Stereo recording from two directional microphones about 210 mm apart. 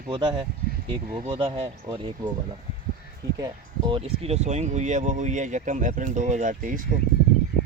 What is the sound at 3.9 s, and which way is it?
Speech, 30° right (ahead or behind).